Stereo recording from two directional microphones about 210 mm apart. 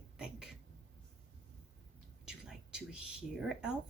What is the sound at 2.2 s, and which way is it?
Whispering, 5° right (ahead or behind).